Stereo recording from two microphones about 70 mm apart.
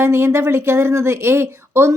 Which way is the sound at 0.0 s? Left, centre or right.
Right.